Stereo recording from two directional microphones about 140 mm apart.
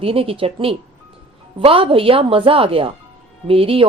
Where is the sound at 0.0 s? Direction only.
40° right (ahead or behind).